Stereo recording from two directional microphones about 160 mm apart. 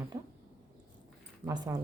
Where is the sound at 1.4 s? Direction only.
25° right (ahead or behind).